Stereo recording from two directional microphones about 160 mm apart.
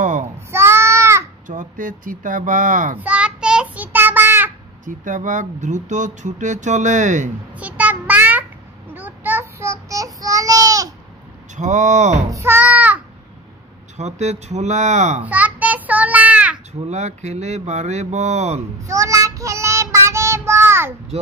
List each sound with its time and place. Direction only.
0.5 s child singing: 15° right (ahead or behind)
1.5 s speech: 55° right (ahead or behind)
3.0 s child singing: 10° right (ahead or behind)
4.8 s speech: 50° right (ahead or behind)
7.5 s child singing: 10° right (ahead or behind)
11.5 s speech: 50° right (ahead or behind)
12.3 s a child's voice: 15° right (ahead or behind)
13.9 s speech: 45° right (ahead or behind)
15.2 s child singing: 10° right (ahead or behind)
16.8 s speech: 45° right (ahead or behind)
18.9 s child singing: 20° right (ahead or behind)
21.1 s a sound: 40° right (ahead or behind)